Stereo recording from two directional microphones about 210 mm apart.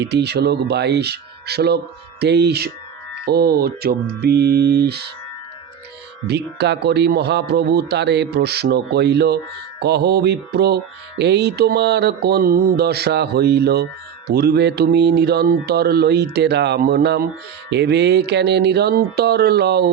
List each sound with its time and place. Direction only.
0.0 s speech: 55° right (ahead or behind)
6.2 s speech: 55° right (ahead or behind)